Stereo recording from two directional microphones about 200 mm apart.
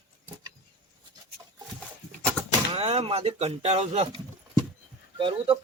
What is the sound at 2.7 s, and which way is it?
Speech, 30° right (ahead or behind).